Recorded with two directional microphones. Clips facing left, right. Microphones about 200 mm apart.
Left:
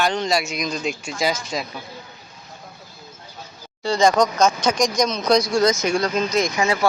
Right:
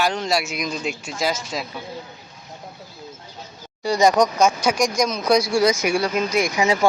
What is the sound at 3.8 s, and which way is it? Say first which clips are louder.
Speech: even; 15° right (ahead or behind).